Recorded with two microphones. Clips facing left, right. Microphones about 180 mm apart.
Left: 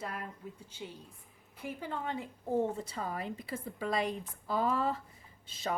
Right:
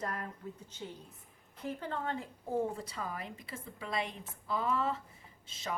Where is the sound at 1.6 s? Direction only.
10° left (ahead or behind).